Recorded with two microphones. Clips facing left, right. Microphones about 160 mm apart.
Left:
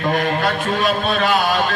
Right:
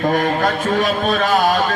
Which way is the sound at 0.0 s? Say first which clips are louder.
Right 2 dB; 40° right (ahead or behind).